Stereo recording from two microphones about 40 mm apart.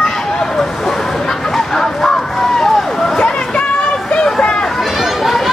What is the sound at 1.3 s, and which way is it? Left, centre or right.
Vehicle, centre.